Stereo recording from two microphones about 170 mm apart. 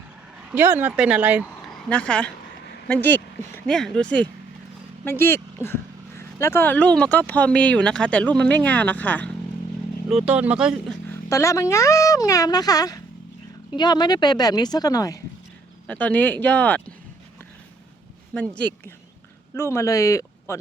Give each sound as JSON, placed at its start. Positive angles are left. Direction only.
{"t": 0.5, "sound": "speech", "side_deg": -10}
{"t": 1.7, "sound": "speech", "side_deg": 5}
{"t": 10.1, "sound": "speech", "side_deg": -5}
{"t": 11.1, "sound": "a woman's voice", "side_deg": 20}
{"t": 15.9, "sound": "speech", "side_deg": 10}
{"t": 18.5, "sound": "speech", "side_deg": 10}